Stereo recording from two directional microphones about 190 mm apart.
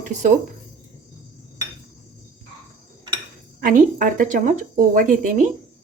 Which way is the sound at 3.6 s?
45° right (ahead or behind).